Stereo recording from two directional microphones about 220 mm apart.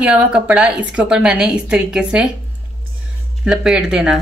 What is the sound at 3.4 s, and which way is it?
Speech, 5° right (ahead or behind).